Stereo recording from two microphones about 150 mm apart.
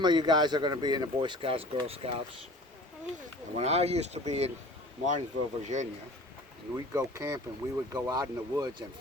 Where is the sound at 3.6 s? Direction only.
45° right (ahead or behind).